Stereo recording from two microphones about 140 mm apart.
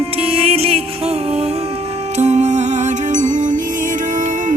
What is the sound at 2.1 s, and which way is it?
Music, 55° right (ahead or behind).